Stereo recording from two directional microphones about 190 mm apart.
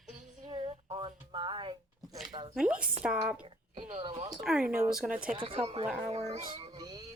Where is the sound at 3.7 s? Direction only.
40° right (ahead or behind).